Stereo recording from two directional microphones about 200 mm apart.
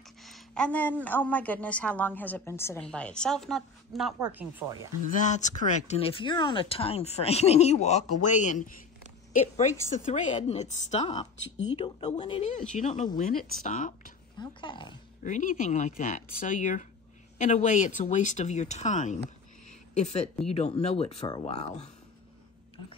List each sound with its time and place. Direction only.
0.2 s a woman's voice: 5° left (ahead or behind)
5.1 s speech: 35° left (ahead or behind)
14.4 s speech: 25° left (ahead or behind)
15.2 s speech: 40° left (ahead or behind)